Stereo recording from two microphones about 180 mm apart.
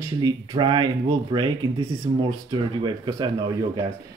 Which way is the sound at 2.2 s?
25° right (ahead or behind).